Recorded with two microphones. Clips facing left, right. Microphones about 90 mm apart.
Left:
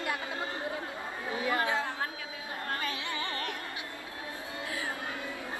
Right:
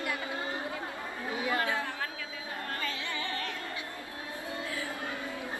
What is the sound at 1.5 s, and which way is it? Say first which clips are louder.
Chatter: left 2 dB; 20° left (ahead or behind).